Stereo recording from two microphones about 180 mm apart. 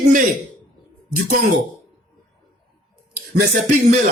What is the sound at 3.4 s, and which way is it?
Speech, 50° right (ahead or behind).